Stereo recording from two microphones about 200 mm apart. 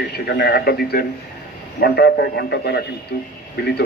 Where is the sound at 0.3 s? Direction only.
50° left (ahead or behind).